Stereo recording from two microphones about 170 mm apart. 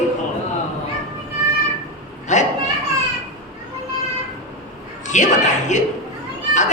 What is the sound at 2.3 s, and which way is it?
Children playing, 45° left (ahead or behind).